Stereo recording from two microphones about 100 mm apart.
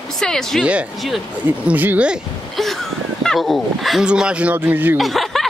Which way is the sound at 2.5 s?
Centre (ahead or behind).